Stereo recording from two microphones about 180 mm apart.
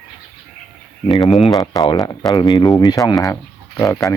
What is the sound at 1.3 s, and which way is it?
Speech, centre (ahead or behind).